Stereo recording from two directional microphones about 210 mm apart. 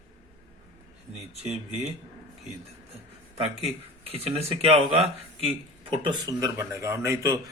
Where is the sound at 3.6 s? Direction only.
30° right (ahead or behind).